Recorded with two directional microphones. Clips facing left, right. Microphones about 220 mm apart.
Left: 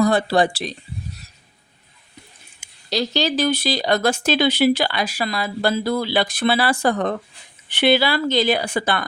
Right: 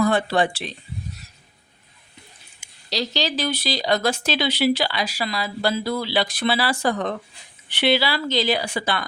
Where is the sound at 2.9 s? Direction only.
50° left (ahead or behind).